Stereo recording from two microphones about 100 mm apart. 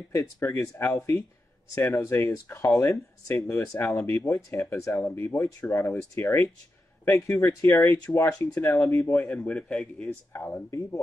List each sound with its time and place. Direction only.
0.1 s speech: 30° left (ahead or behind)
9.3 s speech: 10° left (ahead or behind)
10.3 s speech: 25° left (ahead or behind)